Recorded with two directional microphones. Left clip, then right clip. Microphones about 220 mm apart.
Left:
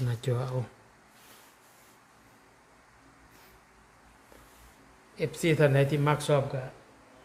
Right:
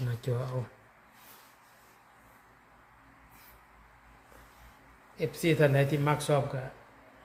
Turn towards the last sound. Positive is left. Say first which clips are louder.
# left 2 dB
turn(degrees=20)  # may be behind; listen again after turning